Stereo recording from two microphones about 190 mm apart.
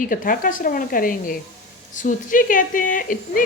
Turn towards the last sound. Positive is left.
turn(degrees=45)  # may be behind; listen again after turning